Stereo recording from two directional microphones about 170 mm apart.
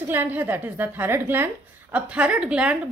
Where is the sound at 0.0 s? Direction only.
10° right (ahead or behind).